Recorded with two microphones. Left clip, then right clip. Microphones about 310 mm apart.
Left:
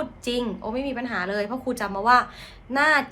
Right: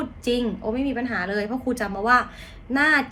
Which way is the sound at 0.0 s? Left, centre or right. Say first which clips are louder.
Right 2 dB; centre.